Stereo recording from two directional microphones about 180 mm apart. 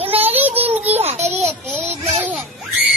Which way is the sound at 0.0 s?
35° right (ahead or behind).